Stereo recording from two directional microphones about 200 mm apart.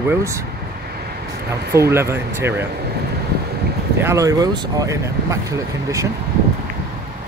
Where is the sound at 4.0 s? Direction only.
15° right (ahead or behind).